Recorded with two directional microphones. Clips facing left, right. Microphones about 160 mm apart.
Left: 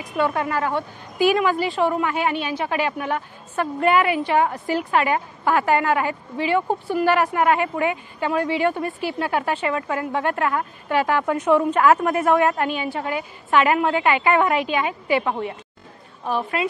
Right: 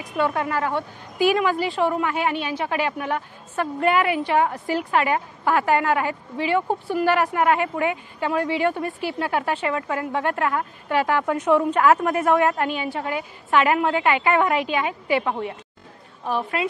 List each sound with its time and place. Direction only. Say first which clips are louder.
0.1 s a woman's voice: left 1 dB; 15° left (ahead or behind)